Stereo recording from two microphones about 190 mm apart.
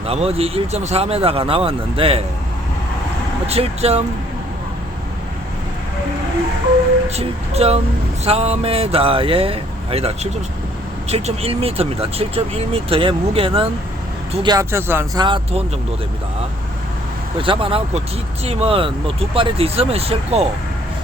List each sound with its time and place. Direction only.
0.1 s speech: 30° right (ahead or behind)
3.4 s speech: 35° right (ahead or behind)
7.2 s speech: 35° right (ahead or behind); by 15.2 s 10° right (ahead or behind)
15.2 s speech: 25° right (ahead or behind)
17.3 s speech: 25° right (ahead or behind)